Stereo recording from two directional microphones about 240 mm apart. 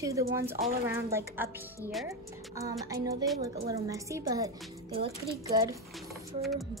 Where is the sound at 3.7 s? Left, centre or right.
Centre.